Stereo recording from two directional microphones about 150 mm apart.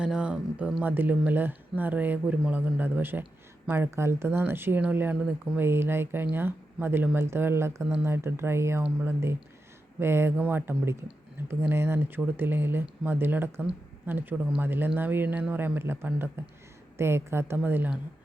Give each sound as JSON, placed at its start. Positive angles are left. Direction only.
{"t": 0.0, "sound": "speech", "side_deg": -5}